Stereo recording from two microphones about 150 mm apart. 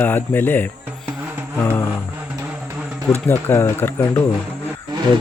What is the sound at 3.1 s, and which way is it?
Speech, 15° left (ahead or behind).